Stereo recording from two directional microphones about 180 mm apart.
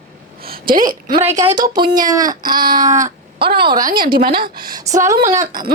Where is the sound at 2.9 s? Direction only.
45° right (ahead or behind).